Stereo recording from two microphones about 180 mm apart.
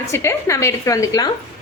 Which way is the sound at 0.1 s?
15° left (ahead or behind).